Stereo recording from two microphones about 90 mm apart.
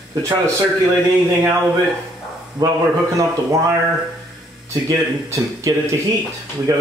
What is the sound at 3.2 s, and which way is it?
Speech, 35° right (ahead or behind).